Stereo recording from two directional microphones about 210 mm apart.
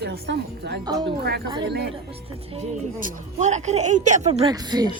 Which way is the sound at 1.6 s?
50° right (ahead or behind).